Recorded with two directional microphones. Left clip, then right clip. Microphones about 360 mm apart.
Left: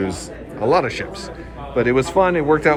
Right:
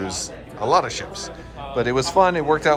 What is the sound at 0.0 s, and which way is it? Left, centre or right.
A man's voice, centre.